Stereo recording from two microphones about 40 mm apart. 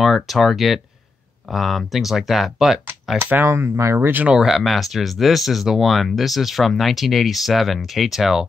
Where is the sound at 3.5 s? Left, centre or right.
Right.